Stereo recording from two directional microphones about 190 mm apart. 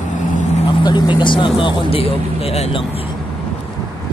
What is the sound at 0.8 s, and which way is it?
Speech, 25° left (ahead or behind).